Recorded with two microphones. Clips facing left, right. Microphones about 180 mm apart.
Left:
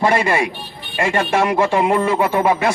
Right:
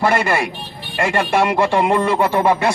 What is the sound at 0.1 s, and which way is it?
A man's voice, 15° left (ahead or behind).